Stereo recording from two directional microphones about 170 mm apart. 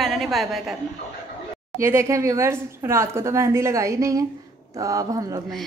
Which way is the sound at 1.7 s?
15° right (ahead or behind).